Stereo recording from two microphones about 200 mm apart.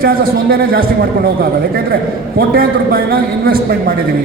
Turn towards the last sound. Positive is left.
turn(degrees=-45)  # may be behind; listen again after turning